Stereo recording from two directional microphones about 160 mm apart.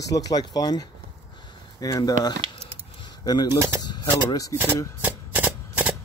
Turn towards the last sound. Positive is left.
turn(degrees=-10)  # may be behind; listen again after turning